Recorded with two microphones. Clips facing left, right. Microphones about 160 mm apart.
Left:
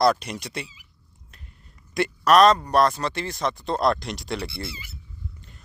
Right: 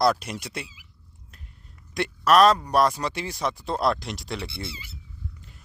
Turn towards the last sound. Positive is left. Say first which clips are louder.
# left 1 dB
turn(degrees=-30)  # may be behind; listen again after turning